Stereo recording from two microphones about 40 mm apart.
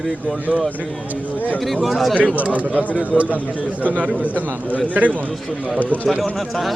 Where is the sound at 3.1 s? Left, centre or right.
Centre.